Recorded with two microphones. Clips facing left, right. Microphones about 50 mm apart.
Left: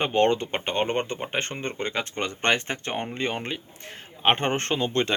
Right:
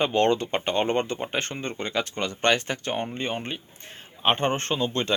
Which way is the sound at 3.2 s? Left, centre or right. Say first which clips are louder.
Left 1 dB; left.